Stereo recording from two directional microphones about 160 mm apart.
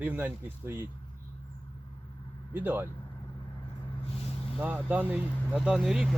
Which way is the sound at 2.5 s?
10° right (ahead or behind).